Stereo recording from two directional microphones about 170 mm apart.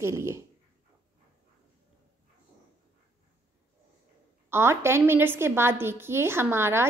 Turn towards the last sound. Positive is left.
turn(degrees=-15)  # may be behind; listen again after turning